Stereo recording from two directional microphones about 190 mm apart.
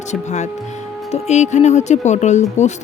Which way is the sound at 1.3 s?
35° left (ahead or behind).